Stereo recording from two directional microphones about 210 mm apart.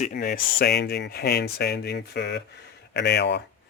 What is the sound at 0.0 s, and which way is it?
Speech, 45° left (ahead or behind).